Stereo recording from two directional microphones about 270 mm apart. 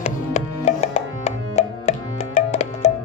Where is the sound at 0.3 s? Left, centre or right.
Left.